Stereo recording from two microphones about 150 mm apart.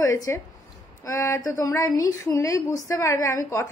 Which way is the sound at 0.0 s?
20° left (ahead or behind).